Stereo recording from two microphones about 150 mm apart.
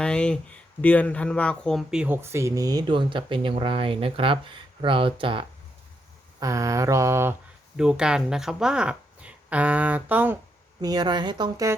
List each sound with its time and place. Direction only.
0.0 s speech: 5° left (ahead or behind); by 5.5 s 35° right (ahead or behind)
6.4 s a woman's voice: 20° right (ahead or behind)
7.8 s speech: 5° right (ahead or behind)
10.8 s a woman's voice: 25° right (ahead or behind)